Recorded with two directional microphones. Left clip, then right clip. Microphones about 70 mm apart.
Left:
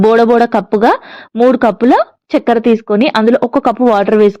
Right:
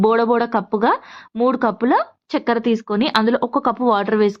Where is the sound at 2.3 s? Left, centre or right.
Left.